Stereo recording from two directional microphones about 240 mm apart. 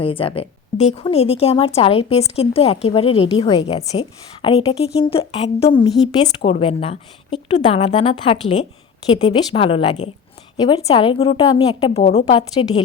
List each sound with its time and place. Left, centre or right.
0.0 s speech: left